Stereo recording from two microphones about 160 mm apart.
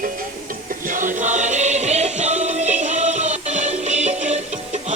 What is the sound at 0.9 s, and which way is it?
Music, 55° right (ahead or behind).